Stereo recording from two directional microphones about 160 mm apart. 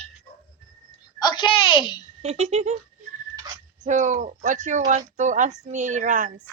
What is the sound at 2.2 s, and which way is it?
Speech, 40° right (ahead or behind).